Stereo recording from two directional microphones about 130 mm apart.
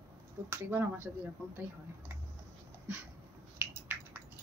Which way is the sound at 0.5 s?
15° right (ahead or behind).